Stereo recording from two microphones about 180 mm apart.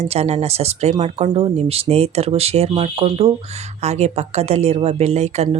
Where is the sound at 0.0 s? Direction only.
35° right (ahead or behind).